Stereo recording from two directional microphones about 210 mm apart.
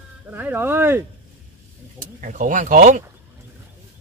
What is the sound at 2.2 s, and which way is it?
Speech, 40° right (ahead or behind).